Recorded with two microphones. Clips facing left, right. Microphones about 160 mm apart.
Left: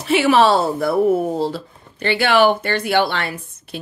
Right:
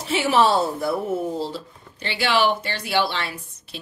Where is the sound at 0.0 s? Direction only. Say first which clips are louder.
Left 5 dB; 70° left (ahead or behind).